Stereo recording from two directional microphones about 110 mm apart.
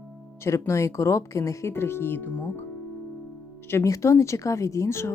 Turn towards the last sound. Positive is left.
turn(degrees=25)  # may be behind; listen again after turning